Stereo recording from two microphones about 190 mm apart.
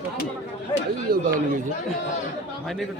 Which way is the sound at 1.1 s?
50° right (ahead or behind).